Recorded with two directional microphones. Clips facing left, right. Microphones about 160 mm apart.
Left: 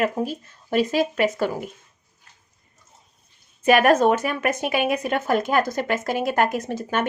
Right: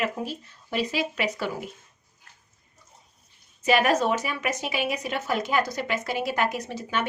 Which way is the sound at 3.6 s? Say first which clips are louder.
Left 6 dB; 55° left (ahead or behind).